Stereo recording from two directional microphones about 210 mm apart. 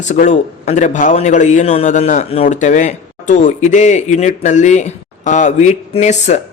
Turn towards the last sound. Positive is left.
turn(degrees=30)  # may be behind; listen again after turning